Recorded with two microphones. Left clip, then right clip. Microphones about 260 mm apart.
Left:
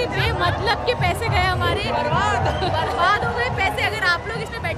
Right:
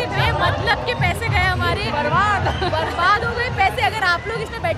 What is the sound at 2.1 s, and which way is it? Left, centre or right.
Music, right.